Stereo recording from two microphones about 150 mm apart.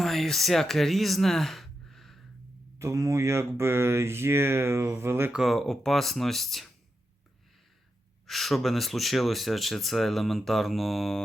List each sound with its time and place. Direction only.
0.0 s speech: centre (ahead or behind)
2.7 s speech: 20° right (ahead or behind)
5.3 s speech: centre (ahead or behind)
8.3 s speech: centre (ahead or behind)